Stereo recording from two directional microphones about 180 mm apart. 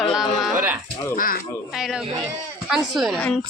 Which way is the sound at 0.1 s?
Centre (ahead or behind).